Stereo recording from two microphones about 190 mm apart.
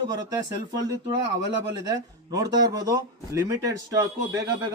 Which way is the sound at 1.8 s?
20° right (ahead or behind).